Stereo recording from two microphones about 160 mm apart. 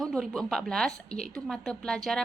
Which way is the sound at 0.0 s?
Centre (ahead or behind).